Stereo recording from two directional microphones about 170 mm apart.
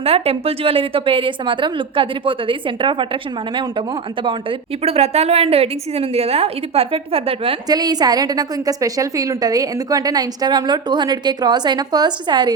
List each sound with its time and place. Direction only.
0.0 s a woman's voice: 35° right (ahead or behind)
7.7 s a woman's voice: 25° right (ahead or behind)